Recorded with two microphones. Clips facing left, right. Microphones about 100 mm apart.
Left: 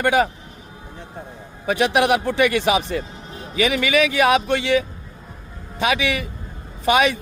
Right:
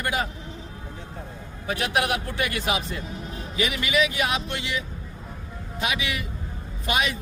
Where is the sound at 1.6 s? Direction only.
90° left.